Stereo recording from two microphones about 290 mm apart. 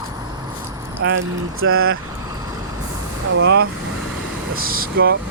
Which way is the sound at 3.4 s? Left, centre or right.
Right.